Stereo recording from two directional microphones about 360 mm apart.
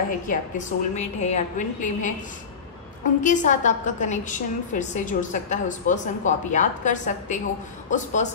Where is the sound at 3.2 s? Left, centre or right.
Left.